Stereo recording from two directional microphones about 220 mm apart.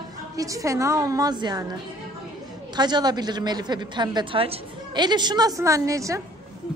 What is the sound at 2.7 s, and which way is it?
A woman's voice, 20° right (ahead or behind).